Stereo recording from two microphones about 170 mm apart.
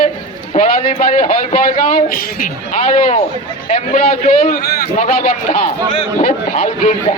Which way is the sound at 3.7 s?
50° left (ahead or behind).